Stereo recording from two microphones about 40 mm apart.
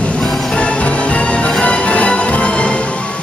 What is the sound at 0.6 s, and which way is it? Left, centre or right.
Music, left.